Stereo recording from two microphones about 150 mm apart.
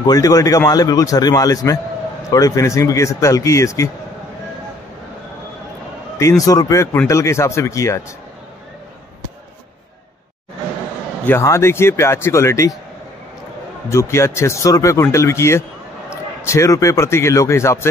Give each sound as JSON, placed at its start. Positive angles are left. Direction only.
{"t": 0.0, "sound": "a man's voice", "side_deg": 25}
{"t": 6.1, "sound": "a man's voice", "side_deg": 20}
{"t": 11.2, "sound": "a man's voice", "side_deg": 15}
{"t": 13.8, "sound": "a man's voice", "side_deg": 20}